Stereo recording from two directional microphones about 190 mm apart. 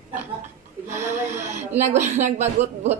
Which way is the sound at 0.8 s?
40° right (ahead or behind).